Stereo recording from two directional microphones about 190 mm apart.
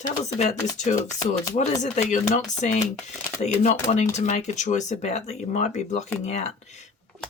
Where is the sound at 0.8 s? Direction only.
40° left (ahead or behind).